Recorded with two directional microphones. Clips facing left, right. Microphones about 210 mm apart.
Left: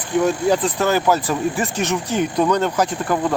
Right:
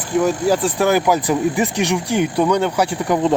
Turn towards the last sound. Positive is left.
turn(degrees=-10)  # may be behind; listen again after turning